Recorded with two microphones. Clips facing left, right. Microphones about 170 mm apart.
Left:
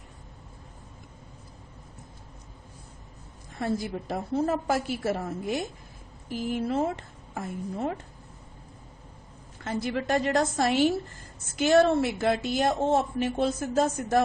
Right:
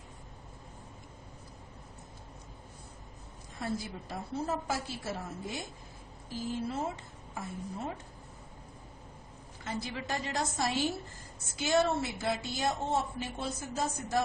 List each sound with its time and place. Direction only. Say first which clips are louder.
3.6 s a woman's voice: left 7 dB; 65° left (ahead or behind)
9.6 s a woman's voice: left 9 dB; 55° left (ahead or behind)